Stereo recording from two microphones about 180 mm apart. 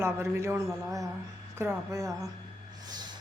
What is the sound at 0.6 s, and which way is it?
Speech, centre (ahead or behind).